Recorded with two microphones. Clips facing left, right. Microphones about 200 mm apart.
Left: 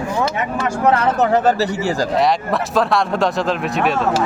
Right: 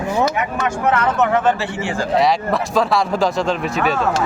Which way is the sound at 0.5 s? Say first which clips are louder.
Left 6 dB; 35° left (ahead or behind).